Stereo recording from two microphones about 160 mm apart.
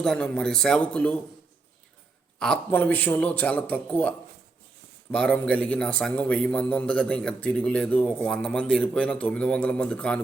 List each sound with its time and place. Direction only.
0.0 s a man's voice: 5° left (ahead or behind)
2.4 s a man's voice: 10° left (ahead or behind)
5.1 s a man's voice: 5° left (ahead or behind)